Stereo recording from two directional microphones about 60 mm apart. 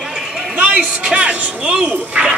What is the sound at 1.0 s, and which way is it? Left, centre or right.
Speech, centre.